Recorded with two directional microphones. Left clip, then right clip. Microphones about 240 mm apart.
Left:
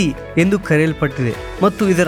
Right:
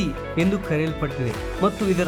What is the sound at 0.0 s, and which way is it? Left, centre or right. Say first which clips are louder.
Speech: left 7 dB; left.